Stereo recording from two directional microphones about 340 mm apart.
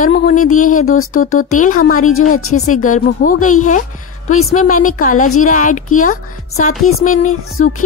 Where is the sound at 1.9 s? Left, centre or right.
Left.